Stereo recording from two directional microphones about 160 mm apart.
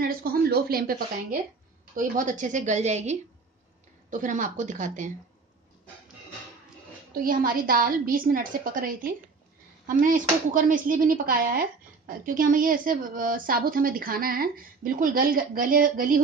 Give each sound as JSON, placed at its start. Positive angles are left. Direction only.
{"t": 0.0, "sound": "speech", "side_deg": -65}
{"t": 2.0, "sound": "a woman's voice", "side_deg": -55}
{"t": 7.2, "sound": "a woman's voice", "side_deg": -60}